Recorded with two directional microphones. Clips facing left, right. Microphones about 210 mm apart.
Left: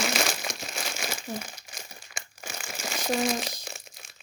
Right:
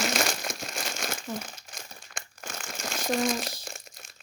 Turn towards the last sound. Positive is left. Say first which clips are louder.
# even
turn(degrees=0)  # may be behind; listen again after turning